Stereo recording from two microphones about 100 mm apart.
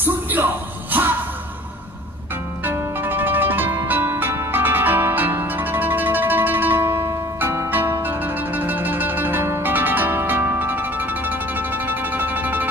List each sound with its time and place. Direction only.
0.0 s music: 20° right (ahead or behind)
2.6 s music: 20° right (ahead or behind)